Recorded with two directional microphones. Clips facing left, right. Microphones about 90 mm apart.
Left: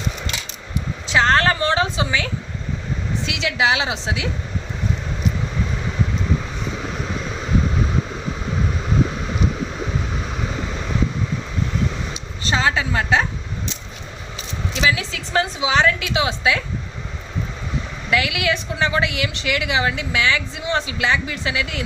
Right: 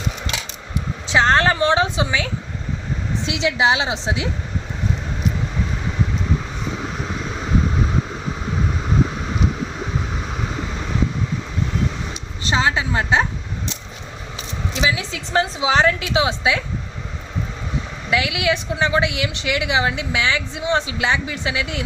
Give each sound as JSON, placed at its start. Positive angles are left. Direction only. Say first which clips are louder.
{"t": 1.0, "sound": "a sound", "louder": "right 1 dB", "side_deg": -20}
{"t": 3.2, "sound": "a woman's voice", "louder": "right 2 dB", "side_deg": -25}
{"t": 12.4, "sound": "a woman's voice", "louder": "even", "side_deg": -20}
{"t": 14.8, "sound": "a woman's voice", "louder": "left 1 dB", "side_deg": -20}
{"t": 18.1, "sound": "a woman's voice", "louder": "right 1 dB", "side_deg": -20}